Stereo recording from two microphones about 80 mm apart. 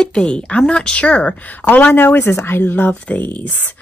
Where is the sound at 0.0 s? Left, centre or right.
Centre.